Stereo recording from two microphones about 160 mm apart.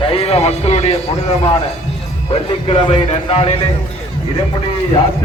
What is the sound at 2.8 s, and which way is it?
Speech, 40° left (ahead or behind).